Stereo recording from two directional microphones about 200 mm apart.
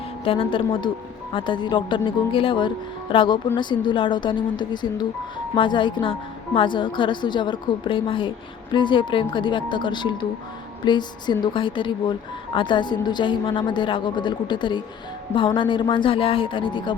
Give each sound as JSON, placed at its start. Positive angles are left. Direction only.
{"t": 0.3, "sound": "speech", "side_deg": 25}